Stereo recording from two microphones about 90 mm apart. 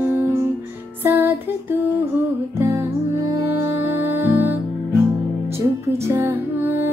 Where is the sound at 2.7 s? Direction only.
40° right (ahead or behind).